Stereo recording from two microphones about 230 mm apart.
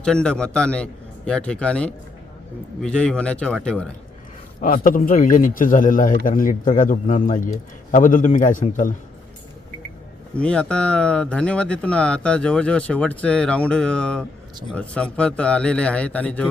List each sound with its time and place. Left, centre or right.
0.0 s speech: centre
4.6 s a man's voice: left
10.3 s speech: centre